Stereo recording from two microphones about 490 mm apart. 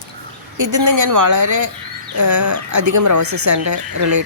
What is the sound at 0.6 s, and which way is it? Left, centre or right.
A woman's voice, right.